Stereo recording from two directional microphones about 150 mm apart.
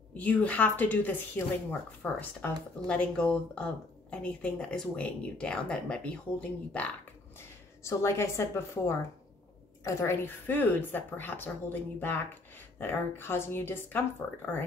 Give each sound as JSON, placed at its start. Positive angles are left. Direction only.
{"t": 0.1, "sound": "a woman's voice", "side_deg": 10}